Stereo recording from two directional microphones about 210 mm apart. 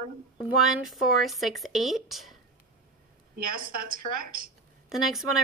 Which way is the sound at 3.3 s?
40° right (ahead or behind).